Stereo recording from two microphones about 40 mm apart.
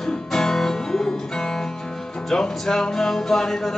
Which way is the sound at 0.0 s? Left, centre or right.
Centre.